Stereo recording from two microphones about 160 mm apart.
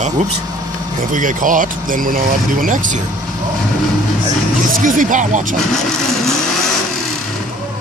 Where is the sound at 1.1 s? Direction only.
55° right (ahead or behind).